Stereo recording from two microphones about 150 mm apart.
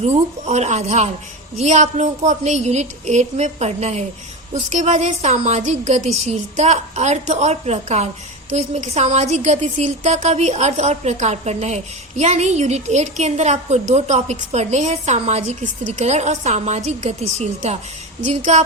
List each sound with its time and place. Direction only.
0.0 s a woman's voice: 50° right (ahead or behind)